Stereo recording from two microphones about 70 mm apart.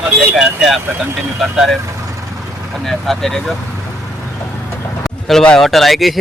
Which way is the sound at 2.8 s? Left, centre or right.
Centre.